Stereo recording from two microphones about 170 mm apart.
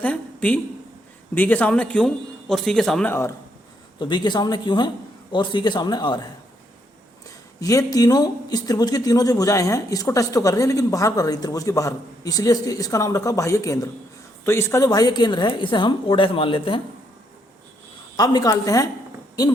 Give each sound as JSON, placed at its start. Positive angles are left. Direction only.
{"t": 0.0, "sound": "a sound", "side_deg": 5}
{"t": 1.4, "sound": "a man's voice", "side_deg": 10}
{"t": 4.0, "sound": "speech", "side_deg": 25}
{"t": 7.3, "sound": "speech", "side_deg": 20}
{"t": 18.2, "sound": "speech", "side_deg": 25}